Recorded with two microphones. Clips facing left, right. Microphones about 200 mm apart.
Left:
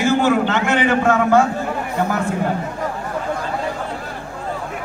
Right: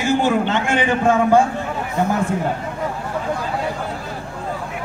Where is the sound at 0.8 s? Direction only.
15° right (ahead or behind).